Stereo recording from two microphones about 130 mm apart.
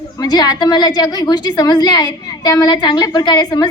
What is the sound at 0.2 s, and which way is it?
A woman's voice, 30° left (ahead or behind).